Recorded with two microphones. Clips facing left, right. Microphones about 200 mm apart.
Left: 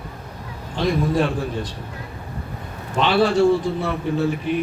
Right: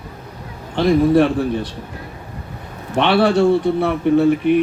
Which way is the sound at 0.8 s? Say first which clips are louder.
Right 7 dB; 65° right (ahead or behind).